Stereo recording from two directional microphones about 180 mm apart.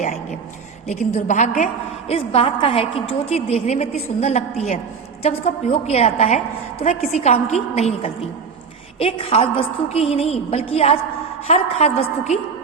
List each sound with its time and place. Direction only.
0.9 s a woman's voice: 40° left (ahead or behind)